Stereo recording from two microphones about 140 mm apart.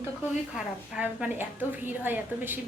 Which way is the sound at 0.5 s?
10° right (ahead or behind).